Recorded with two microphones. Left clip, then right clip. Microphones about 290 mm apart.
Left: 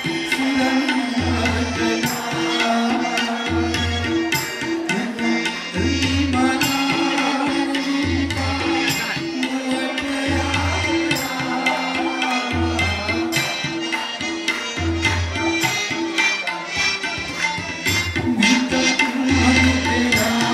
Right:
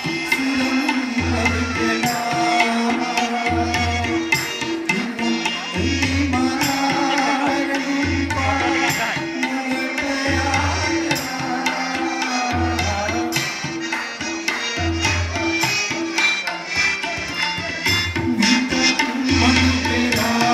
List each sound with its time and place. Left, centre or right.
18.4 s music: centre